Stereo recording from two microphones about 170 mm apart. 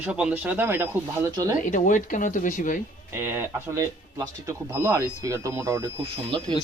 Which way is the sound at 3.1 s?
10° right (ahead or behind).